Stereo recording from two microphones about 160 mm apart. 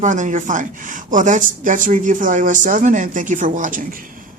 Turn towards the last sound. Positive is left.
turn(degrees=-55)  # may be behind; listen again after turning